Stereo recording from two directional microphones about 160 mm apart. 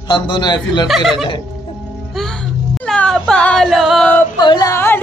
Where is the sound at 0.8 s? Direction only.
Centre (ahead or behind).